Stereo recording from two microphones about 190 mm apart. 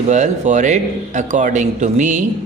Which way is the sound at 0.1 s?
40° right (ahead or behind).